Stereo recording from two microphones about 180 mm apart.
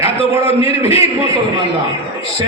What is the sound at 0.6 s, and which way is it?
Speech, 35° left (ahead or behind).